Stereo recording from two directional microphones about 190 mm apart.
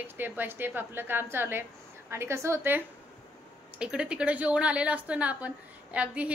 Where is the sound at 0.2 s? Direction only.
10° right (ahead or behind).